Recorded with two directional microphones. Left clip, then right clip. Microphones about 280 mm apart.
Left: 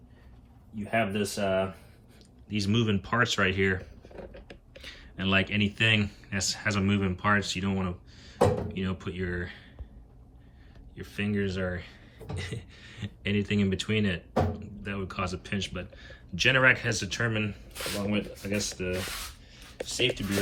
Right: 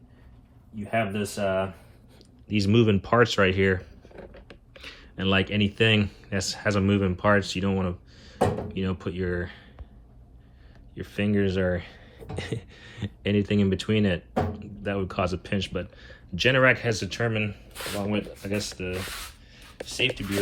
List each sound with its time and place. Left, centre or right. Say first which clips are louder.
0.8 s speech: right 1 dB; centre
10.9 s speech: right 5 dB; centre